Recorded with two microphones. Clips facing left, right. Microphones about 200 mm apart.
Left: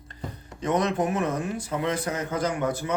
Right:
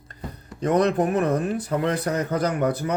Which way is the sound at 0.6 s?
35° right (ahead or behind).